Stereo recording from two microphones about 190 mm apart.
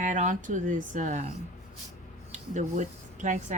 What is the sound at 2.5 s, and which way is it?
Speech, 40° right (ahead or behind).